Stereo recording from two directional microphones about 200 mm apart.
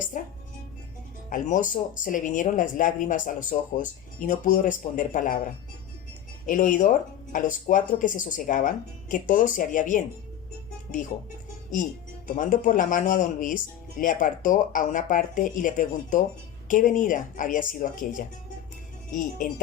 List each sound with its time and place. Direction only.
0.1 s speech: 40° left (ahead or behind)
6.4 s speech: 40° left (ahead or behind)
12.4 s speech: 40° left (ahead or behind)